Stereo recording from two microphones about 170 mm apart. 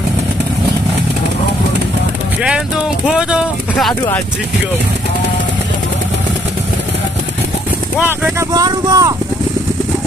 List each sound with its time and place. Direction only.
3.1 s speech: 5° right (ahead or behind)
8.0 s speech: 10° right (ahead or behind)
8.5 s speech: 20° right (ahead or behind)